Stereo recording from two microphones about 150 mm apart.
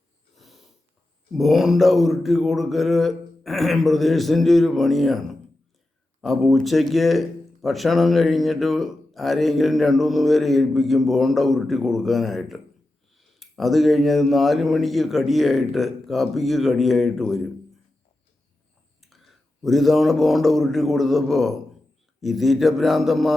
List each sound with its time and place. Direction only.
0.3 s wheeze: centre (ahead or behind)
1.3 s speech: centre (ahead or behind)
19.1 s speech: centre (ahead or behind)